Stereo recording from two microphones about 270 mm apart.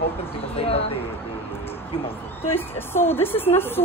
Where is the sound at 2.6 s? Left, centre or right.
Centre.